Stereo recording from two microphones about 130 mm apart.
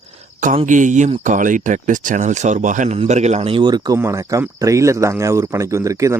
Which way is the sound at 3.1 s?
60° right (ahead or behind).